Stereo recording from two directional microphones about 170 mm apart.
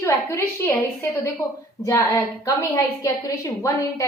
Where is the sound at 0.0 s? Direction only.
15° left (ahead or behind).